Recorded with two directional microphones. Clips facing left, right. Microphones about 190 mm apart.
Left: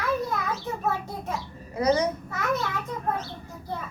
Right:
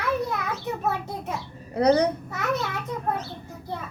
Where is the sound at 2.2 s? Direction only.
20° right (ahead or behind).